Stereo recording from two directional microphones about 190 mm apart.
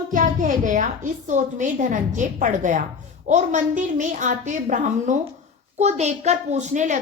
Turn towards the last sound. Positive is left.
turn(degrees=-40)  # may be behind; listen again after turning